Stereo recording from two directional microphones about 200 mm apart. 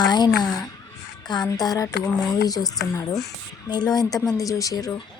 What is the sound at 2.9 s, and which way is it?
A woman's voice, 15° left (ahead or behind).